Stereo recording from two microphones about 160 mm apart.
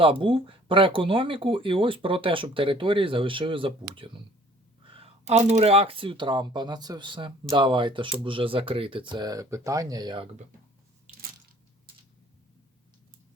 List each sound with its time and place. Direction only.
0.0 s speech: 35° right (ahead or behind)